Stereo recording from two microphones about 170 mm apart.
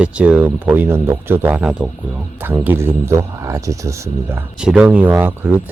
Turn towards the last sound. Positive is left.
turn(degrees=-10)  # may be behind; listen again after turning